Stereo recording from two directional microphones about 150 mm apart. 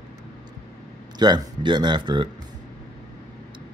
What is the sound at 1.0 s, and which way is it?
Speech, 30° right (ahead or behind).